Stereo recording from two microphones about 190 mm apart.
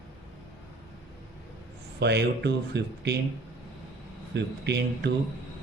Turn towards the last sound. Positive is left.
turn(degrees=-60)  # may be behind; listen again after turning